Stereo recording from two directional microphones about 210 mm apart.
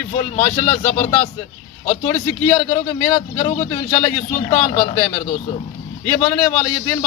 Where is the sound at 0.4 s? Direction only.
25° left (ahead or behind).